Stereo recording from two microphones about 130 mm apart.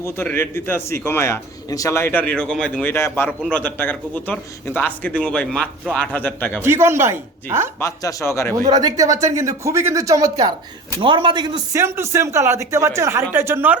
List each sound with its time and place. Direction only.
0.0 s a man's voice: 20° left (ahead or behind)
2.9 s a man's voice: 20° left (ahead or behind)
6.6 s speech: 20° right (ahead or behind)
7.8 s a man's voice: 25° left (ahead or behind)
8.5 s speech: 30° right (ahead or behind)
11.0 s a man's voice: 40° right (ahead or behind)
11.7 s speech: 20° right (ahead or behind)